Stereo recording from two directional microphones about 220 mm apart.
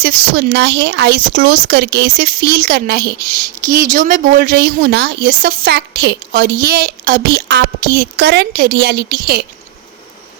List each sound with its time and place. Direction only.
0.0 s speech: 45° right (ahead or behind)